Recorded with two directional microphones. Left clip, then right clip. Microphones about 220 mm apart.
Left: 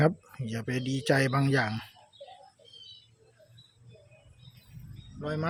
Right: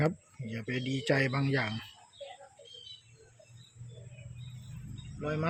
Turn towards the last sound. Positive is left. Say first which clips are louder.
# left 1 dB
turn(degrees=5)  # may be behind; listen again after turning